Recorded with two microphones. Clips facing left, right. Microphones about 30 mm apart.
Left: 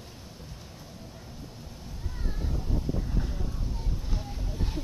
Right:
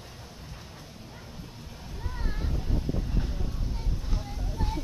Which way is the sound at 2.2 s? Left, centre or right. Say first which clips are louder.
Even; right.